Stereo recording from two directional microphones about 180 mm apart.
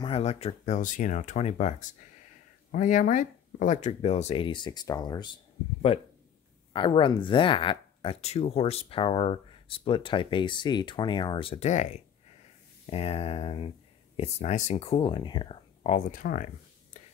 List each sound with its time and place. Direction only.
0.0 s speech: 35° left (ahead or behind)
6.7 s speech: 30° left (ahead or behind); by 17.0 s 45° left (ahead or behind)